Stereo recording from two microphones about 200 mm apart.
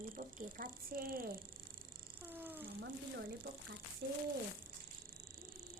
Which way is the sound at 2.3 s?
10° right (ahead or behind).